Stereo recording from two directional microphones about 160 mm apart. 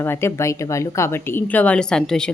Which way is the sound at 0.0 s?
15° left (ahead or behind).